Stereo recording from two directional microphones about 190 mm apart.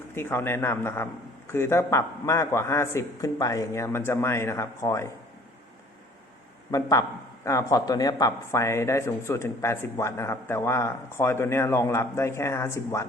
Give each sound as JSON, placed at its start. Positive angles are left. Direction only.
{"t": 0.1, "sound": "speech", "side_deg": 10}
{"t": 6.7, "sound": "speech", "side_deg": 15}